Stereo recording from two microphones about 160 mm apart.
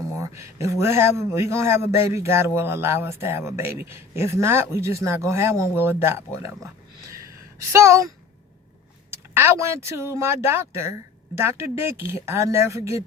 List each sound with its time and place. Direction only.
0.1 s speech: 20° right (ahead or behind)
7.1 s a sound: 20° right (ahead or behind)
9.0 s speech: 15° right (ahead or behind)